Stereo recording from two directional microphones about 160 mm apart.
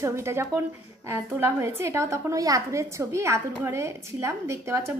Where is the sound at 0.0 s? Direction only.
15° right (ahead or behind).